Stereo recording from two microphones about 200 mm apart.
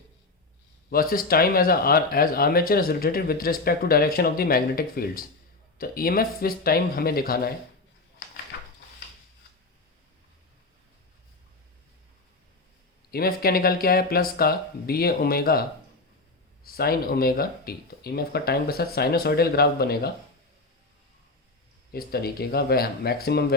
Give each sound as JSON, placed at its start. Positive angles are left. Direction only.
{"t": 0.9, "sound": "speech", "side_deg": 45}
{"t": 8.5, "sound": "a sound", "side_deg": 55}
{"t": 13.1, "sound": "speech", "side_deg": 50}
{"t": 16.6, "sound": "speech", "side_deg": 50}
{"t": 21.9, "sound": "speech", "side_deg": 50}